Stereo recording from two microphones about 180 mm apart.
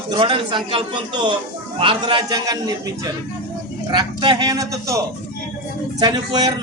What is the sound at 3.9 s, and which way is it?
A man's voice, 25° right (ahead or behind).